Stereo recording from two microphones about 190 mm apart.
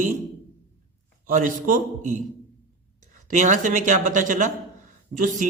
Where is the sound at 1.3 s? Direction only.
45° right (ahead or behind).